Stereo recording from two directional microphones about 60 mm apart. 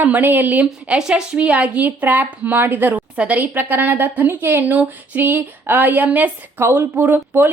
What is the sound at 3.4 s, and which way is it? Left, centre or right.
A woman's voice, right.